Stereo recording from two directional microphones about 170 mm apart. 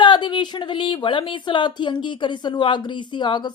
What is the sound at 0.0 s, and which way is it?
Speech, 25° left (ahead or behind).